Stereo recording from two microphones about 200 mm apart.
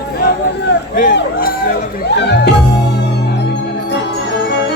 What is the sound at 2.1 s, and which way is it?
Speech, 60° left (ahead or behind).